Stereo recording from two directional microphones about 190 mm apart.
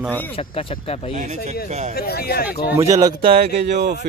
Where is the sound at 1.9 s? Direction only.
55° left (ahead or behind).